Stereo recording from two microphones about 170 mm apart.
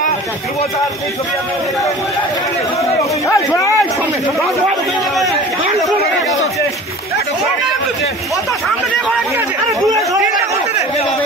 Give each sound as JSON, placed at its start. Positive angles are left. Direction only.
{"t": 3.3, "sound": "speech", "side_deg": 15}